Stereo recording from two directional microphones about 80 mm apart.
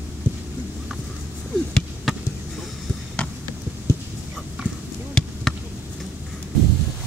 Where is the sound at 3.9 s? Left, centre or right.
Left.